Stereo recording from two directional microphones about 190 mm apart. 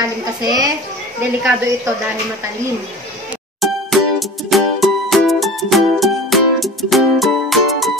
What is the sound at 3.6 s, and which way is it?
Music, centre (ahead or behind).